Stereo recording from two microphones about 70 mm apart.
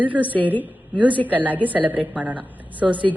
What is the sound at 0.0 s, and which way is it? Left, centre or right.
A woman's voice, right.